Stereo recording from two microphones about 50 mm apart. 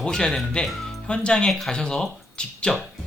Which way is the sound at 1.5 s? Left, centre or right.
Centre.